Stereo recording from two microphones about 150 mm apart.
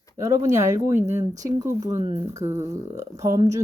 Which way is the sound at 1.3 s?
20° right (ahead or behind).